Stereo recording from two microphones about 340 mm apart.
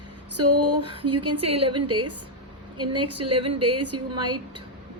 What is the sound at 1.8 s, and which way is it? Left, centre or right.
A woman's voice, right.